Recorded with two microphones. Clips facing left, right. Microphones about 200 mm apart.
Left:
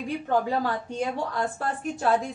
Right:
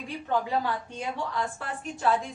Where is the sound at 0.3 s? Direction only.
45° left (ahead or behind).